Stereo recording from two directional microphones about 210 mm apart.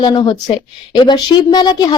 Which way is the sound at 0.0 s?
20° left (ahead or behind).